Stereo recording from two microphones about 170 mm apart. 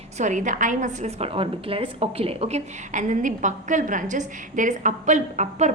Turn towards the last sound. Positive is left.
turn(degrees=-45)  # may be behind; listen again after turning